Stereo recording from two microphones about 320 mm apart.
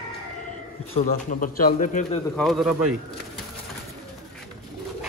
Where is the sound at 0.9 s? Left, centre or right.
Left.